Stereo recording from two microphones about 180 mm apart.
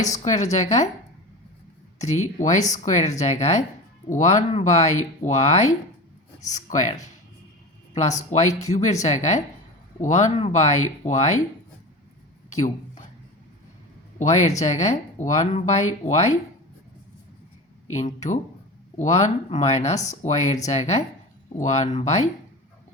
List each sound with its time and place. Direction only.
0.3 s speech: 40° left (ahead or behind)
2.0 s speech: 40° left (ahead or behind)
8.3 s speech: 40° left (ahead or behind)
12.5 s speech: 40° left (ahead or behind)
14.2 s speech: 40° left (ahead or behind)
17.9 s speech: 40° left (ahead or behind)